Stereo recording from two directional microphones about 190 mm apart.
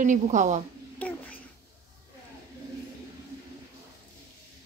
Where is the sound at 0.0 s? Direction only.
40° right (ahead or behind).